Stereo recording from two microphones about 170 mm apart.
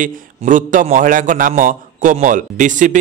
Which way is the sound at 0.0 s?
50° right (ahead or behind).